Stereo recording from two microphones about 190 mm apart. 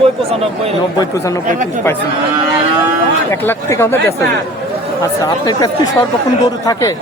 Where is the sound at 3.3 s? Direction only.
15° left (ahead or behind).